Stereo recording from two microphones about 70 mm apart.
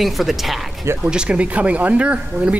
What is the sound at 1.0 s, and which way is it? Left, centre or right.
Speech, centre.